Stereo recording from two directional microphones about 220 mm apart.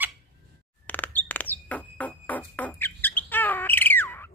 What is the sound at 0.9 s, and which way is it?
Music, 10° left (ahead or behind).